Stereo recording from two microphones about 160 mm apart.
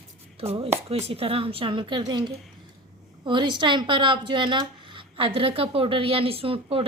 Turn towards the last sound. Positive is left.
turn(degrees=-35)  # may be behind; listen again after turning